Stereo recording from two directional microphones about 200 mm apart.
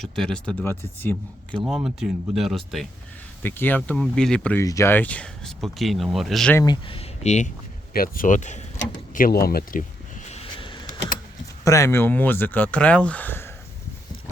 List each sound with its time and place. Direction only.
0.0 s speech: 5° left (ahead or behind)
1.6 s speech: 5° right (ahead or behind)
4.6 s speech: 15° left (ahead or behind)
6.6 s speech: 25° left (ahead or behind); by 9.8 s 50° left (ahead or behind)
10.2 s a sound: 30° left (ahead or behind)
11.6 s speech: 15° left (ahead or behind)